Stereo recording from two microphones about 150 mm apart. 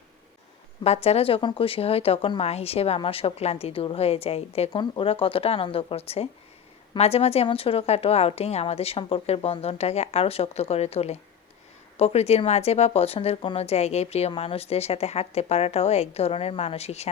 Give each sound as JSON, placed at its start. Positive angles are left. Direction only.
{"t": 0.9, "sound": "speech", "side_deg": 45}